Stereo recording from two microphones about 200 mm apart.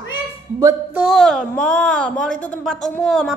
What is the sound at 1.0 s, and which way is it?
A woman's voice, centre (ahead or behind).